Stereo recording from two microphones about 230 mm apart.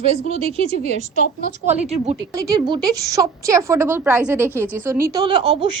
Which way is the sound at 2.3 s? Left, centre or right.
Centre.